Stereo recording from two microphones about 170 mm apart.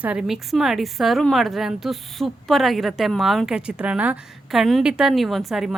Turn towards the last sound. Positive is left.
turn(degrees=0)  # may be behind; listen again after turning